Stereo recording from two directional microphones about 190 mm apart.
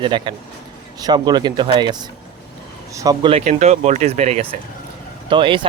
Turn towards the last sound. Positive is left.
turn(degrees=-25)  # may be behind; listen again after turning